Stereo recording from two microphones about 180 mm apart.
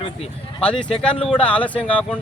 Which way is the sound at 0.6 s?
5° left (ahead or behind).